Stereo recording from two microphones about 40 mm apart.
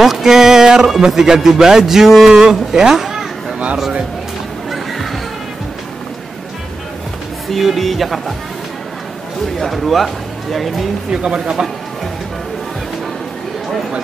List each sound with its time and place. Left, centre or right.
0.0 s speech: centre
7.4 s speech: centre
9.6 s speech: centre
11.1 s speech: centre